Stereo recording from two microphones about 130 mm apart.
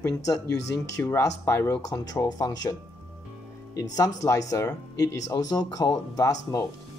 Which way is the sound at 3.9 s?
25° left (ahead or behind).